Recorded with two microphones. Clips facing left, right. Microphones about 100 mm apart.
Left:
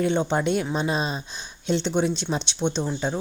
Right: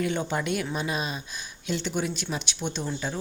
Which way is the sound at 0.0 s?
25° left (ahead or behind).